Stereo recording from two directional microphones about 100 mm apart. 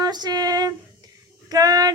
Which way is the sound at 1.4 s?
40° right (ahead or behind).